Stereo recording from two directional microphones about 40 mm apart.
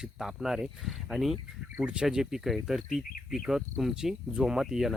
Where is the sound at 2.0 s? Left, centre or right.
Centre.